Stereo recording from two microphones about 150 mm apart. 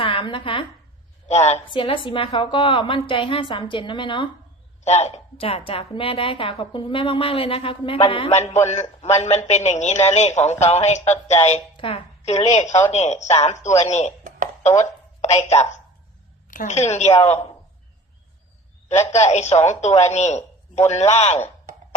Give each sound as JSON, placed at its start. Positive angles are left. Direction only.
{"t": 0.0, "sound": "a sound", "side_deg": 35}
{"t": 1.3, "sound": "a woman's voice", "side_deg": 50}
{"t": 1.6, "sound": "a woman's voice", "side_deg": 35}
{"t": 4.8, "sound": "a woman's voice", "side_deg": 50}
{"t": 14.8, "sound": "a woman's voice", "side_deg": 50}
{"t": 19.0, "sound": "a woman's voice", "side_deg": 50}